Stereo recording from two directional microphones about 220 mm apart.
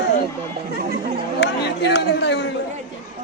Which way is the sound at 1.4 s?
50° left (ahead or behind).